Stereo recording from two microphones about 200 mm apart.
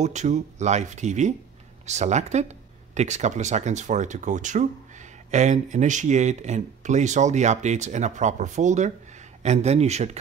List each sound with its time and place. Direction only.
0.0 s speech: 35° right (ahead or behind)